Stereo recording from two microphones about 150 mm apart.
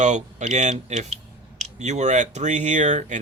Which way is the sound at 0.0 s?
50° right (ahead or behind).